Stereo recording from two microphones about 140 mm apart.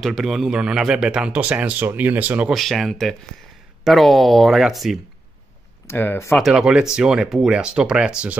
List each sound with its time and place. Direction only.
0.0 s speech: centre (ahead or behind)
2.5 s speech: centre (ahead or behind)
5.9 s speech: 15° left (ahead or behind)
6.3 s speech: centre (ahead or behind)